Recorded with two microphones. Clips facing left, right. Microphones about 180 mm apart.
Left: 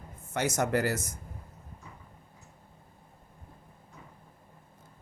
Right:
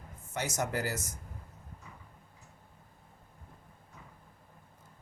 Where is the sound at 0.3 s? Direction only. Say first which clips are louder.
Left 6 dB; 60° left (ahead or behind).